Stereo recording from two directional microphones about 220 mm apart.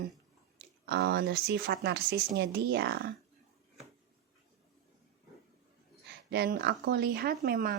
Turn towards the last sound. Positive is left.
turn(degrees=-45)  # may be behind; listen again after turning